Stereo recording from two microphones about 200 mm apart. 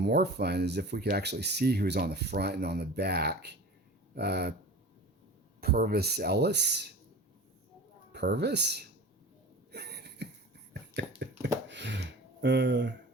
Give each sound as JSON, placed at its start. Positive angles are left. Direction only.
{"t": 0.0, "sound": "speech", "side_deg": -55}
{"t": 5.5, "sound": "speech", "side_deg": -50}
{"t": 8.1, "sound": "speech", "side_deg": -55}
{"t": 9.7, "sound": "a sound", "side_deg": -55}
{"t": 11.7, "sound": "speech", "side_deg": -60}